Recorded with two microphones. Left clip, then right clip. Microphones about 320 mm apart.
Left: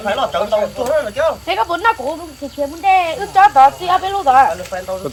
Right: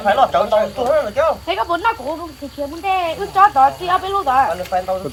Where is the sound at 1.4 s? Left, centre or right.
Left.